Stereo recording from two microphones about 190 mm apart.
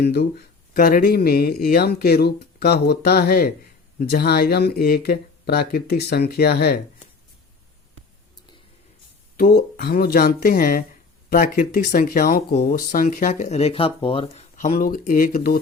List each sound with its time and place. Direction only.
0.0 s speech: 55° left (ahead or behind)
9.4 s speech: 50° left (ahead or behind); by 14.4 s 30° left (ahead or behind)
14.5 s speech: 45° left (ahead or behind)